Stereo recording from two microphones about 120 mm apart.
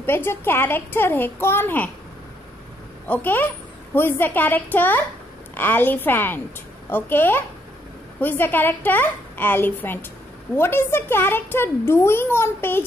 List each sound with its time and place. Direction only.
0.0 s a woman's voice: 20° left (ahead or behind)
3.1 s a woman's voice: 15° left (ahead or behind)